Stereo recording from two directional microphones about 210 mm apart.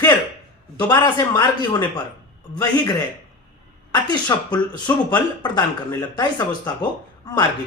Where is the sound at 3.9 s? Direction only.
20° left (ahead or behind).